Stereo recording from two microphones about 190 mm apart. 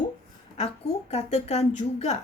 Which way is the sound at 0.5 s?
35° left (ahead or behind).